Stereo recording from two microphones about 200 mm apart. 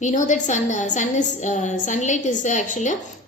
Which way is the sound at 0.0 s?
40° left (ahead or behind).